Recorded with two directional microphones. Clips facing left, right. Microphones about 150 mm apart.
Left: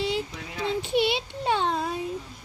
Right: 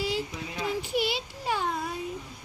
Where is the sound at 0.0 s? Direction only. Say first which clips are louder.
Left 2 dB; 25° left (ahead or behind).